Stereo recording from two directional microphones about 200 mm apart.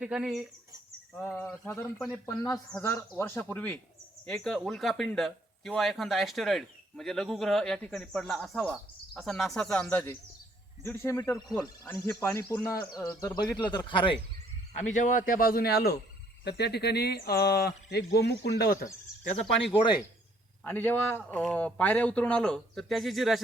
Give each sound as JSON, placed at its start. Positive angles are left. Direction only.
{"t": 0.0, "sound": "speech", "side_deg": -5}
{"t": 1.1, "sound": "speech", "side_deg": 5}
{"t": 14.9, "sound": "speech", "side_deg": 40}
{"t": 19.7, "sound": "speech", "side_deg": 25}
{"t": 20.7, "sound": "speech", "side_deg": 10}